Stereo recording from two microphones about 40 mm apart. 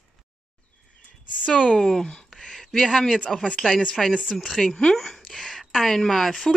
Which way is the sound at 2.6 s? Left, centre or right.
Centre.